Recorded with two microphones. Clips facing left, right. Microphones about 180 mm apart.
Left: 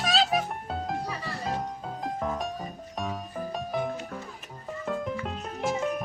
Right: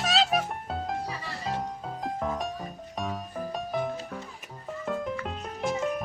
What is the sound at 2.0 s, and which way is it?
Music, centre (ahead or behind).